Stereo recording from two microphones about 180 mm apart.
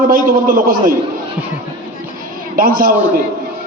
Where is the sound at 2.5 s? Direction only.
50° right (ahead or behind).